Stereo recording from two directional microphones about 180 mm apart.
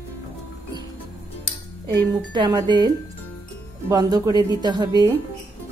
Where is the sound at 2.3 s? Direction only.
25° right (ahead or behind).